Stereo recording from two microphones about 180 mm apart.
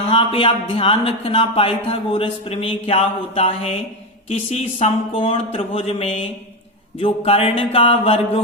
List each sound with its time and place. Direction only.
0.1 s speech: 30° left (ahead or behind)